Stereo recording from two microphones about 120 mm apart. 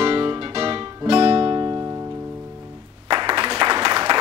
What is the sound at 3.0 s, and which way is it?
Applause, 40° right (ahead or behind).